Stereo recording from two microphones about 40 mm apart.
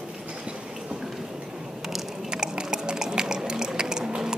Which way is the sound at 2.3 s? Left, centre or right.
Centre.